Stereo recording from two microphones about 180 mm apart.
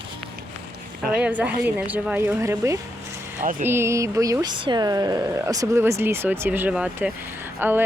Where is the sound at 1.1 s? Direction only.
10° right (ahead or behind).